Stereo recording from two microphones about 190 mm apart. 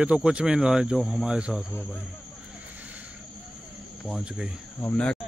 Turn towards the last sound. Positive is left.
turn(degrees=5)  # may be behind; listen again after turning